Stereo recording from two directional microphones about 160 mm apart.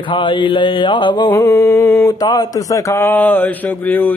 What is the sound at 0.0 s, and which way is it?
Mantra, 30° left (ahead or behind).